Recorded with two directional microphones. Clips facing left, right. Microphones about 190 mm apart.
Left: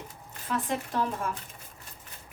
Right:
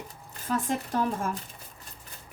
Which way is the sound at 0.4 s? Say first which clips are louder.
Right 2 dB; 45° right (ahead or behind).